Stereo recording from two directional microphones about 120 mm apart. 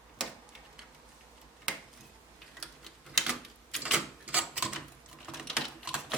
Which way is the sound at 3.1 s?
5° right (ahead or behind).